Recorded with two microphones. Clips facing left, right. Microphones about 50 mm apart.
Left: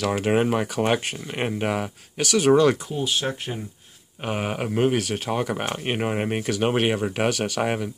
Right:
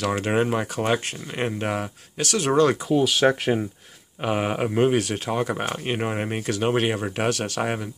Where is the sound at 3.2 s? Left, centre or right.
Right.